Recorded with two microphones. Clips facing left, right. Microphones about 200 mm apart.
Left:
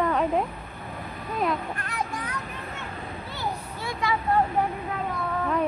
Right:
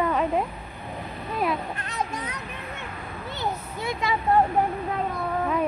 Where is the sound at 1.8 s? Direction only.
20° right (ahead or behind).